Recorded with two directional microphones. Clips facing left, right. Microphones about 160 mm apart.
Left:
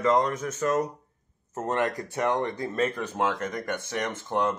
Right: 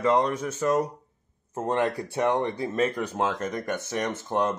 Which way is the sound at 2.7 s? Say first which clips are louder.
Right 2 dB; 15° right (ahead or behind).